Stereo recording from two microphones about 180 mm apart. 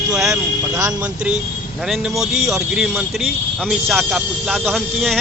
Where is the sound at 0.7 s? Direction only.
15° right (ahead or behind).